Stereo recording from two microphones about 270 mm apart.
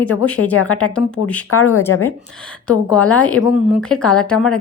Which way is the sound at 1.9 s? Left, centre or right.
Left.